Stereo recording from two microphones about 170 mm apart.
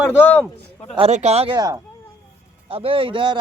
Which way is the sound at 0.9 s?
35° right (ahead or behind).